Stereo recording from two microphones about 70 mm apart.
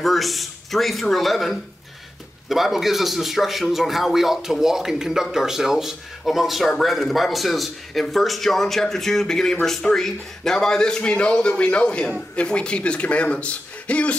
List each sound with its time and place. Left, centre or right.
0.0 s a man's voice: centre